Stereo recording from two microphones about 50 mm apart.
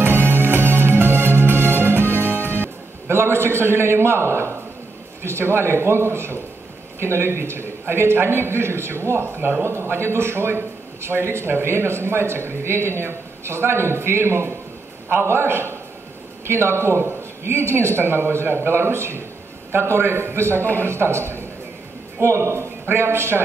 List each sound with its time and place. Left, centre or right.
0.0 s music: right
5.2 s a man's voice: right
9.2 s a man's voice: right
9.7 s a man's voice: right